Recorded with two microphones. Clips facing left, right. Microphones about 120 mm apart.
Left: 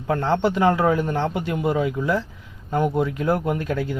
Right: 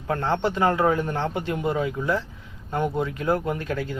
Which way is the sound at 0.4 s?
10° left (ahead or behind).